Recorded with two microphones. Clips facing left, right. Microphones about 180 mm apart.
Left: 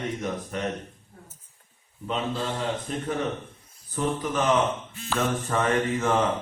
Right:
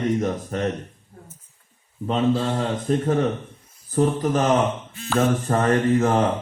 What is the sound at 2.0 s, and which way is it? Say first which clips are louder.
Speech: right 8 dB; 45° right (ahead or behind).